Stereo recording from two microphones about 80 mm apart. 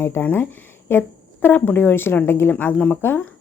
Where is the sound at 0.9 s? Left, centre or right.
Left.